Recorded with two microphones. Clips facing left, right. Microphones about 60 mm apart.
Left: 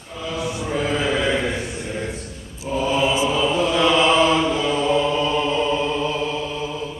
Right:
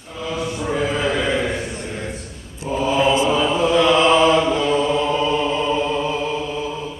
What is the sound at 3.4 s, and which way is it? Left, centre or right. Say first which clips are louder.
Chant: right 2 dB; centre.